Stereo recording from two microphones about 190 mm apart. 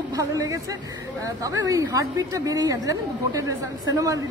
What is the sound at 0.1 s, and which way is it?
A woman's voice, 15° right (ahead or behind).